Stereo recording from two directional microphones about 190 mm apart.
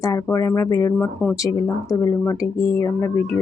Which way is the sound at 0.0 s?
15° left (ahead or behind).